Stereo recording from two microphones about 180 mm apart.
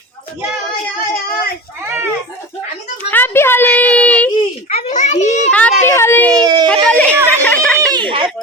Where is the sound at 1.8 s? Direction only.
15° right (ahead or behind).